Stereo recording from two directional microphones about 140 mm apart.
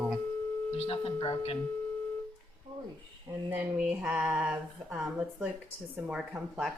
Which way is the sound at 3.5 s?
10° right (ahead or behind).